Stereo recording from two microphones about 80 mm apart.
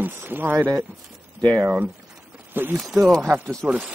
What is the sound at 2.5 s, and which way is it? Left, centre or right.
Speech, right.